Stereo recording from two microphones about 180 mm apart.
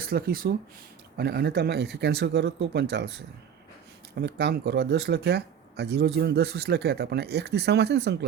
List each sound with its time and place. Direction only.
0.0 s speech: 55° right (ahead or behind)